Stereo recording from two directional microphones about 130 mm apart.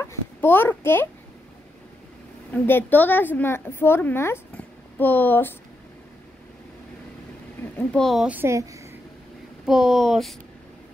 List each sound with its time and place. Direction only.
0.0 s a sound: 15° left (ahead or behind)
2.5 s a woman's voice: 15° left (ahead or behind)
7.7 s speech: 5° left (ahead or behind)
8.3 s a woman's voice: 20° right (ahead or behind)
9.7 s speech: 5° right (ahead or behind)